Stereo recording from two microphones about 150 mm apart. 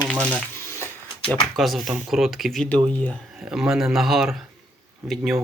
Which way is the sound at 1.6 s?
Centre (ahead or behind).